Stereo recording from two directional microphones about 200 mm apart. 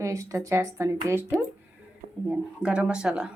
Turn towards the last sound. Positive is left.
turn(degrees=-5)  # may be behind; listen again after turning